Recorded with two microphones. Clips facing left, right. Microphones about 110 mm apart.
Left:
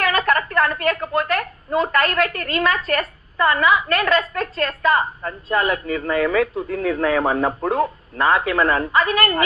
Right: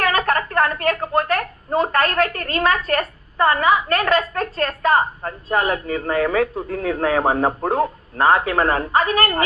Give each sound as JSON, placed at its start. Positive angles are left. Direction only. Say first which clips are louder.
{"t": 0.0, "sound": "a woman's voice", "louder": "even", "side_deg": -40}